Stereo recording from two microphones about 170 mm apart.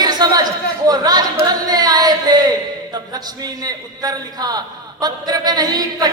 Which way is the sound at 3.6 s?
20° right (ahead or behind).